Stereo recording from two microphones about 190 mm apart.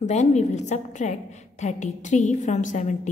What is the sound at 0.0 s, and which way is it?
A woman's voice, 35° left (ahead or behind).